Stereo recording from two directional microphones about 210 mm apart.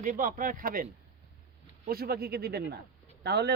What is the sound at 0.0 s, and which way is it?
Speech, 40° right (ahead or behind).